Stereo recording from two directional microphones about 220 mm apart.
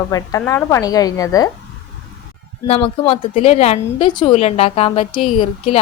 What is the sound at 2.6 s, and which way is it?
A woman's voice, 25° left (ahead or behind).